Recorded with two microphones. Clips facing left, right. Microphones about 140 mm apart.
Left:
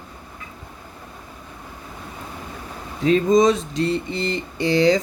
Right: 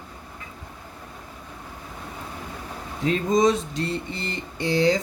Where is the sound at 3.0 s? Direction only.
90° left.